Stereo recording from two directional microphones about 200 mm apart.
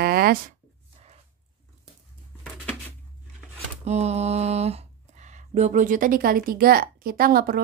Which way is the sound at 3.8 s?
35° right (ahead or behind).